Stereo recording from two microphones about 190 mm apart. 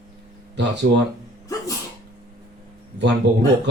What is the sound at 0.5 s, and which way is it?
Speech, 65° right (ahead or behind).